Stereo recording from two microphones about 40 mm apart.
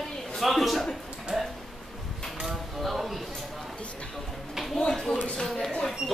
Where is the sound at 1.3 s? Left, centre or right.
Centre.